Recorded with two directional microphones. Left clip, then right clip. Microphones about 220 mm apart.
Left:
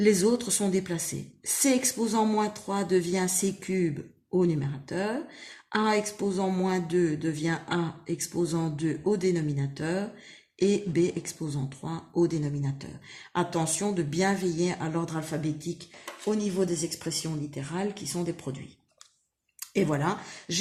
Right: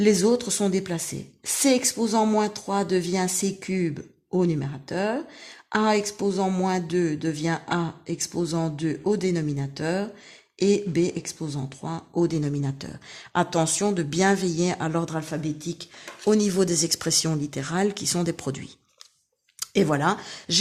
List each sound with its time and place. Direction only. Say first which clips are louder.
0.0 s speech: right 3 dB; 30° right (ahead or behind)
15.8 s speech: right 6 dB; 50° right (ahead or behind)